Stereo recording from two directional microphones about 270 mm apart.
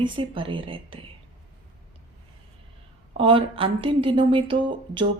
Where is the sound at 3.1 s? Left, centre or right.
Centre.